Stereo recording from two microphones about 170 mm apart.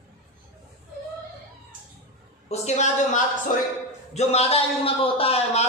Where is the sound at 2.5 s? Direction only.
40° left (ahead or behind).